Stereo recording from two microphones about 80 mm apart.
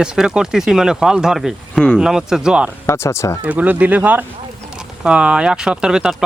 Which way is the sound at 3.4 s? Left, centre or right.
Centre.